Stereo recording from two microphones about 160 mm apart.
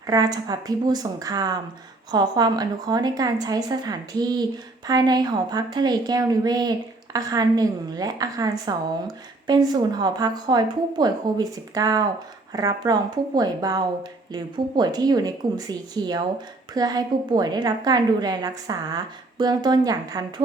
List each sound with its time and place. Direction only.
0.1 s a woman's voice: 25° right (ahead or behind)